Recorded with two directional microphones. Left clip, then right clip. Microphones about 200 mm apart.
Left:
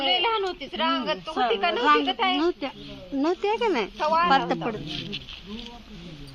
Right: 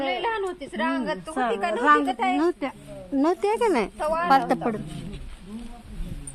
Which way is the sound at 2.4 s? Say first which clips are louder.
Right 1 dB; 55° right (ahead or behind).